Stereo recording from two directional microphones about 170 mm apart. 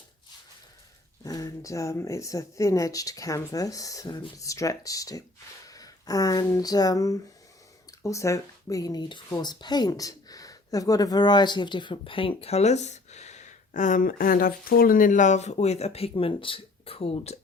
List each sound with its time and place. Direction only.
1.2 s speech: 20° left (ahead or behind)